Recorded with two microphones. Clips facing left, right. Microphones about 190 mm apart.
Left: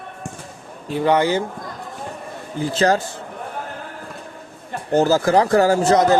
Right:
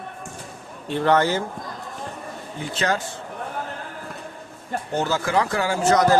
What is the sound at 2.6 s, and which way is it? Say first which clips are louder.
Speech: left 7 dB; 35° left (ahead or behind).